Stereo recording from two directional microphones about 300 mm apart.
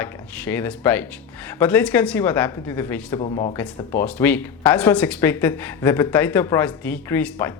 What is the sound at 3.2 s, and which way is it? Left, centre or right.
Speech, centre.